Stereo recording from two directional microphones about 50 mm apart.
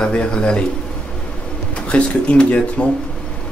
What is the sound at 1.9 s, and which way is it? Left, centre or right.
Speech, left.